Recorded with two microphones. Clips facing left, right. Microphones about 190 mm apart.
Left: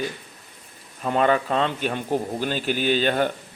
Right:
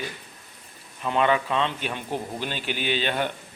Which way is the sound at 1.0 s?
40° left (ahead or behind).